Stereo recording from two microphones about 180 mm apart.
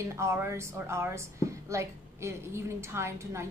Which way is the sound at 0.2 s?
15° right (ahead or behind).